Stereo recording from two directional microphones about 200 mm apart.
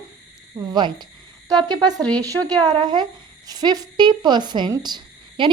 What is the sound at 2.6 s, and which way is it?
A woman's voice, 20° right (ahead or behind).